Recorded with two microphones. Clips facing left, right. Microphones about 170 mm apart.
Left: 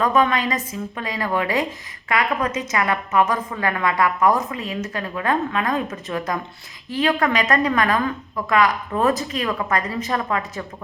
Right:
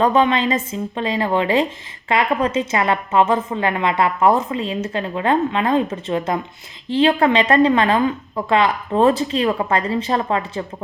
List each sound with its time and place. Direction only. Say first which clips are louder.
0.0 s a woman's voice: right 3 dB; 30° right (ahead or behind)